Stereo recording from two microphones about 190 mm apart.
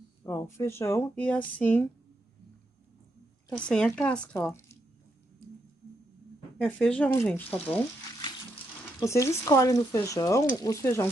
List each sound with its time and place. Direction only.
0.2 s speech: 15° left (ahead or behind)
3.5 s speech: 5° left (ahead or behind)
6.6 s speech: 5° left (ahead or behind)
9.0 s speech: 15° left (ahead or behind)